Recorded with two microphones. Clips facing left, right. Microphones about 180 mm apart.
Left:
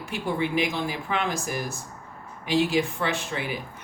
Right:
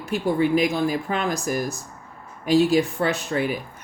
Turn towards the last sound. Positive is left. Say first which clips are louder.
# right 6 dB
turn(degrees=-45)  # may be behind; listen again after turning